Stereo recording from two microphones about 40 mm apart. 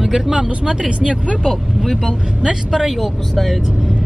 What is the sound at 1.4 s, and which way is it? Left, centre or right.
Speech, centre.